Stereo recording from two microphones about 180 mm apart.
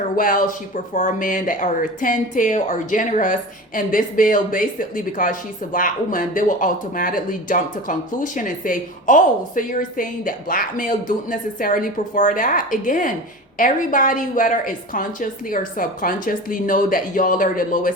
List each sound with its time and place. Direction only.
0.2 s speech: 50° left (ahead or behind)